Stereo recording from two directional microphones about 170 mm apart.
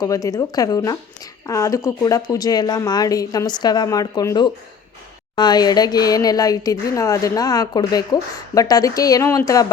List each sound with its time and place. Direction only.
0.0 s speech: 20° left (ahead or behind)